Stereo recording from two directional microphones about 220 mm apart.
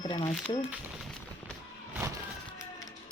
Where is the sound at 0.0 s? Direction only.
20° left (ahead or behind).